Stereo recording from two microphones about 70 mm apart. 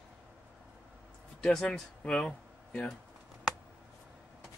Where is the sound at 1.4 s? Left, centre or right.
Centre.